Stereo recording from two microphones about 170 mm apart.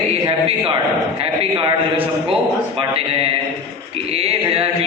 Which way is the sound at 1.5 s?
30° right (ahead or behind).